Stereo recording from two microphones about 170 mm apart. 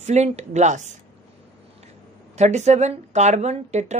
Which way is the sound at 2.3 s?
40° right (ahead or behind).